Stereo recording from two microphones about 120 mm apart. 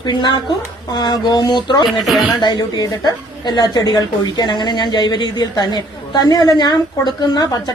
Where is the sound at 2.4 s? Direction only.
40° left (ahead or behind).